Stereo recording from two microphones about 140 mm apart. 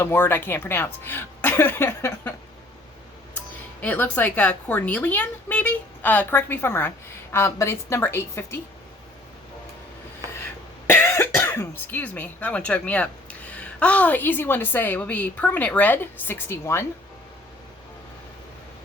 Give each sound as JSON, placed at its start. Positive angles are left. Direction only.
{"t": 0.0, "sound": "a woman's voice", "side_deg": 15}
{"t": 3.8, "sound": "a woman's voice", "side_deg": 10}
{"t": 10.2, "sound": "a sound", "side_deg": -25}
{"t": 10.8, "sound": "a woman's voice", "side_deg": 15}